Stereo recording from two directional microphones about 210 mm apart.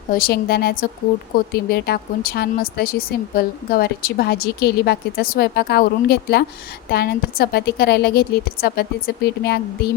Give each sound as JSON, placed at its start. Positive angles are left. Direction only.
{"t": 0.1, "sound": "a woman's voice", "side_deg": 45}